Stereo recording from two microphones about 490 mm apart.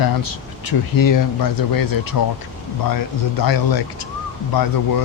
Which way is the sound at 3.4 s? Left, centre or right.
Left.